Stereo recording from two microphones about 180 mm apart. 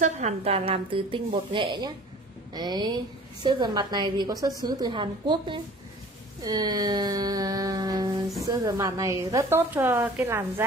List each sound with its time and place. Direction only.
0.0 s a woman's voice: 35° right (ahead or behind); by 10.4 s 15° right (ahead or behind)